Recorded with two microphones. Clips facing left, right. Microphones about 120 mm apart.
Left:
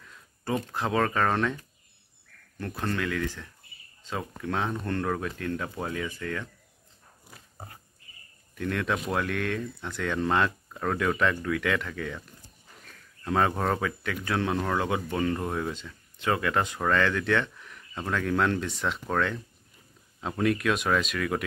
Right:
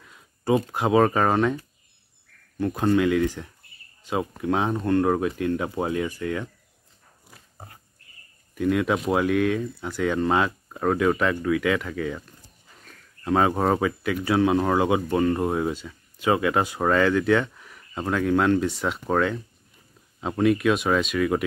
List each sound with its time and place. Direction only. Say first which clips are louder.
0.5 s speech: right 8 dB; 15° right (ahead or behind)
2.6 s speech: right 10 dB; 15° right (ahead or behind)
8.5 s speech: right 7 dB; 10° right (ahead or behind)
13.2 s speech: right 5 dB; 5° right (ahead or behind)